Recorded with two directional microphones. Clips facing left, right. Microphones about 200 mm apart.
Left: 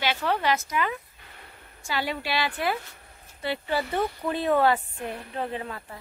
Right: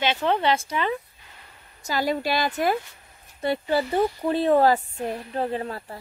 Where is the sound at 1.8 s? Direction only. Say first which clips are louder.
Right 5 dB; 40° right (ahead or behind).